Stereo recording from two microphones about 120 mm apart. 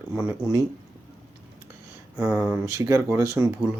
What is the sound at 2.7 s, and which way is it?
Speech, 25° right (ahead or behind).